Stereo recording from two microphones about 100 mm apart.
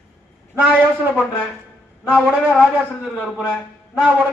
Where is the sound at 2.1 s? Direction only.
15° right (ahead or behind).